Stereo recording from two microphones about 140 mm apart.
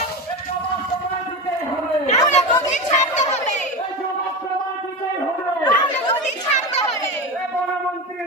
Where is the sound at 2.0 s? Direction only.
60° left (ahead or behind).